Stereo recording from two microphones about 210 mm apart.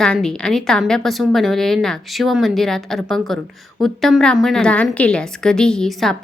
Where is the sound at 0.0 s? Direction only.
5° left (ahead or behind).